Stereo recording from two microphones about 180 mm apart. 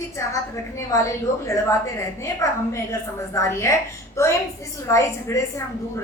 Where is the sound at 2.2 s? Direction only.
15° left (ahead or behind).